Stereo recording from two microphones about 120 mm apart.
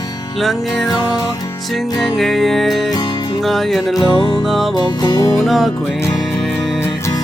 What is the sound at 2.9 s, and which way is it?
Music, 35° left (ahead or behind).